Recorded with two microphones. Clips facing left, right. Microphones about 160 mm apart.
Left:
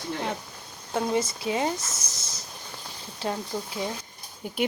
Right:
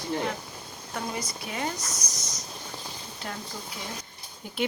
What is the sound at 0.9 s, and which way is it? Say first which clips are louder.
Speech: left 8 dB; 25° left (ahead or behind).